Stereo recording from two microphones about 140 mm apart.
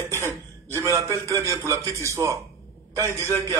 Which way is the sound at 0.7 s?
20° right (ahead or behind).